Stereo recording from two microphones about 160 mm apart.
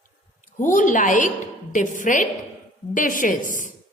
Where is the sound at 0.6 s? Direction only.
55° left (ahead or behind).